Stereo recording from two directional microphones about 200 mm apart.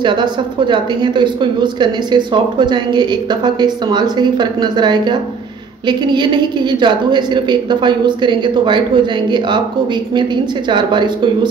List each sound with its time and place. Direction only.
0.0 s a woman's voice: 20° right (ahead or behind)